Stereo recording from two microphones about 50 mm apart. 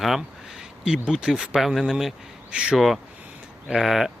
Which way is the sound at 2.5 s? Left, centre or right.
Centre.